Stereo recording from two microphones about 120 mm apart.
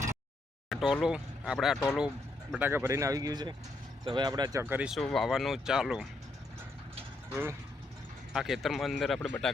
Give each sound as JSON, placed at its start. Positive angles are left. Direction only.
{"t": 0.7, "sound": "a sound", "side_deg": -5}
{"t": 1.0, "sound": "speech", "side_deg": -5}
{"t": 2.5, "sound": "speech", "side_deg": -15}
{"t": 4.6, "sound": "speech", "side_deg": -15}
{"t": 4.9, "sound": "speech", "side_deg": 0}
{"t": 7.3, "sound": "speech", "side_deg": -20}
{"t": 8.3, "sound": "speech", "side_deg": -5}